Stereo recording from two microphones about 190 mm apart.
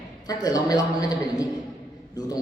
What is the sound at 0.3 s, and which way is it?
A man's voice, 20° left (ahead or behind).